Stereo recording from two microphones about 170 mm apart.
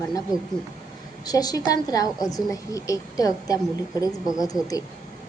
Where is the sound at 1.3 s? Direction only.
20° left (ahead or behind).